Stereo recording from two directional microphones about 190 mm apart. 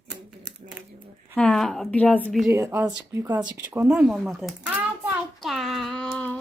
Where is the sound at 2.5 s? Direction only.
15° right (ahead or behind).